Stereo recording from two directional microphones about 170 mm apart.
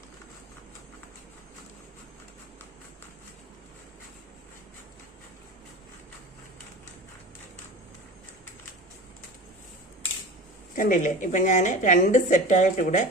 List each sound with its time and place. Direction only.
10.8 s a woman's voice: 50° left (ahead or behind)